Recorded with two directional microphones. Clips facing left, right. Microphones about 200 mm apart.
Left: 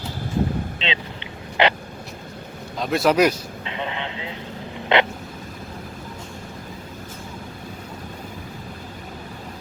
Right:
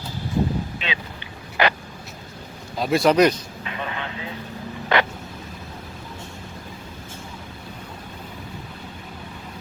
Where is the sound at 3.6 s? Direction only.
25° left (ahead or behind).